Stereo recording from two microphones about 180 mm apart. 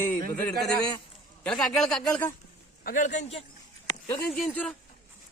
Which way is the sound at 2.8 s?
50° left (ahead or behind).